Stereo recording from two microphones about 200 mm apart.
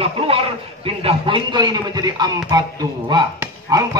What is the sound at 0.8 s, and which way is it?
Speech, 25° right (ahead or behind).